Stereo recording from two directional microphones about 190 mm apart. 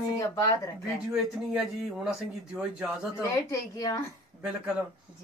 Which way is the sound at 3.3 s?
20° left (ahead or behind).